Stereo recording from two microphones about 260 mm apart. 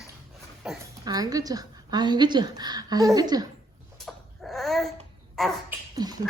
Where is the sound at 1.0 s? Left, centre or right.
Centre.